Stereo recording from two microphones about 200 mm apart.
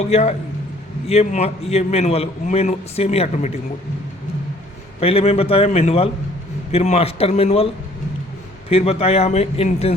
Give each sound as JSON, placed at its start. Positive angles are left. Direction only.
{"t": 0.0, "sound": "a man's voice", "side_deg": 35}
{"t": 4.9, "sound": "a man's voice", "side_deg": 30}
{"t": 8.7, "sound": "a man's voice", "side_deg": 30}